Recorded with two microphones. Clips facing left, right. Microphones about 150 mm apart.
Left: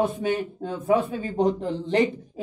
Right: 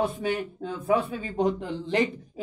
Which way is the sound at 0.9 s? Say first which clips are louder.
Left 3 dB; 40° left (ahead or behind).